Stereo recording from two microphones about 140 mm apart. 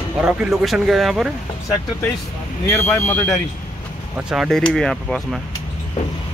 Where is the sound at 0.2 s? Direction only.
5° right (ahead or behind).